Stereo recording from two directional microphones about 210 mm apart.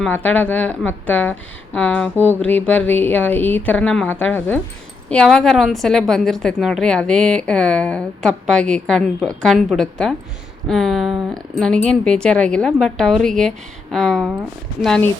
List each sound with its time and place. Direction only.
0.0 s a woman's voice: 10° left (ahead or behind)